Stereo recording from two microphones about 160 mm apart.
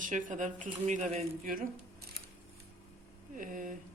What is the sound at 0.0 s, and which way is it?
Speech, 55° right (ahead or behind).